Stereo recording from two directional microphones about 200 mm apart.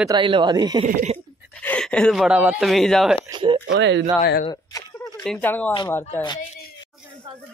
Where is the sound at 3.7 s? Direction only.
60° right (ahead or behind).